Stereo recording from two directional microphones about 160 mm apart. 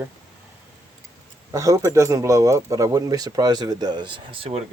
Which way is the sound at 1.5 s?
20° right (ahead or behind).